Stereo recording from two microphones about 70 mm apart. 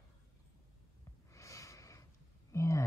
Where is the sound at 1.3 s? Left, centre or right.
Left.